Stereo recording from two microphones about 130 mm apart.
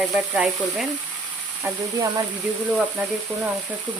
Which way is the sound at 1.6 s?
20° right (ahead or behind).